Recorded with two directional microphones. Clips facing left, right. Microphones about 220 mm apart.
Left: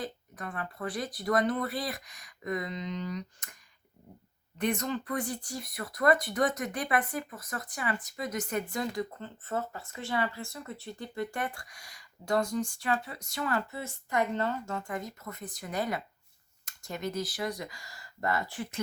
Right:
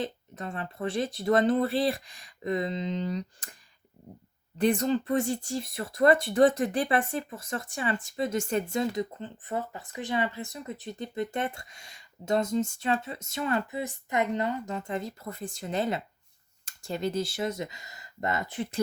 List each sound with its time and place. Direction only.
0.0 s speech: 25° right (ahead or behind)